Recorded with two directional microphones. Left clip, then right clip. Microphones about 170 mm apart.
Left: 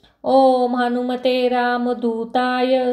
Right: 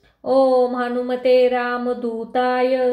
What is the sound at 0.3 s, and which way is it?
Speech, 30° left (ahead or behind).